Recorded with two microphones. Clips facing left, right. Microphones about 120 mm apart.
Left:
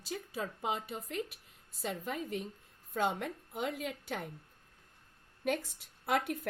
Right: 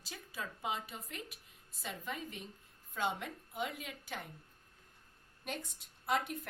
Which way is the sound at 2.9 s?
55° left (ahead or behind).